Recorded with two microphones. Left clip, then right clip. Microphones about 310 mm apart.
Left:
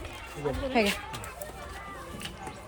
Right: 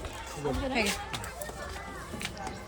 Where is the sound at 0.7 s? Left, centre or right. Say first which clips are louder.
Left 4 dB; centre.